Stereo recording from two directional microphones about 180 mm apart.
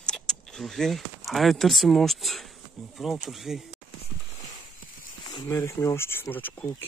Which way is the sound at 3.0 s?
Centre (ahead or behind).